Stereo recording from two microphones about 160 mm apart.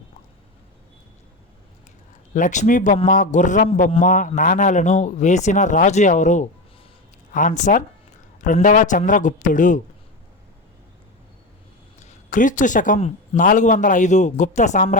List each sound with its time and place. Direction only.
2.3 s speech: 50° left (ahead or behind)
11.9 s speech: 50° left (ahead or behind)